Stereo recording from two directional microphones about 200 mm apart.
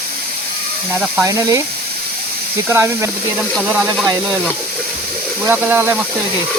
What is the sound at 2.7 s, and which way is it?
Speech, 10° right (ahead or behind).